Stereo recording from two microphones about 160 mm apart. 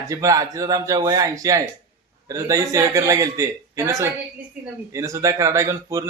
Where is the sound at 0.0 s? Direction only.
20° right (ahead or behind).